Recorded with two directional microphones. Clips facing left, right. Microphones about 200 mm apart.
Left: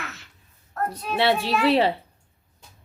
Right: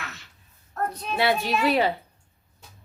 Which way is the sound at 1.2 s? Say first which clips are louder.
Left 2 dB; 30° left (ahead or behind).